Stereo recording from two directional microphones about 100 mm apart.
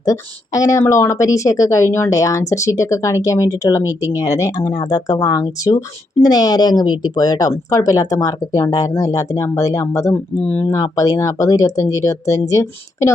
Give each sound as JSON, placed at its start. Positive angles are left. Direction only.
{"t": 0.0, "sound": "speech", "side_deg": 35}